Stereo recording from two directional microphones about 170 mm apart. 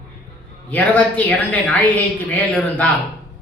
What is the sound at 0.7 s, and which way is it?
A woman's voice, 10° left (ahead or behind).